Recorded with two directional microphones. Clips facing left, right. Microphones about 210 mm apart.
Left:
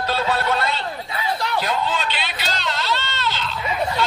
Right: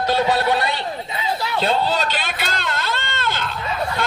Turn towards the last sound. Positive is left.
turn(degrees=-50)  # may be behind; listen again after turning